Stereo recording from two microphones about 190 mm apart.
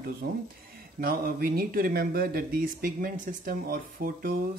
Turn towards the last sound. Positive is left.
turn(degrees=-50)  # may be behind; listen again after turning